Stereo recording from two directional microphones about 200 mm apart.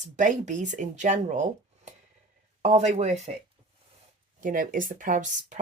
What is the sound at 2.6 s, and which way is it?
Speech, 35° right (ahead or behind).